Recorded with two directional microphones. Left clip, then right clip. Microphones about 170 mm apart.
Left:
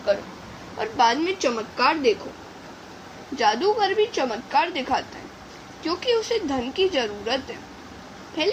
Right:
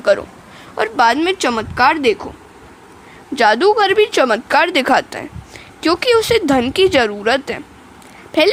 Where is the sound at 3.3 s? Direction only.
65° right (ahead or behind).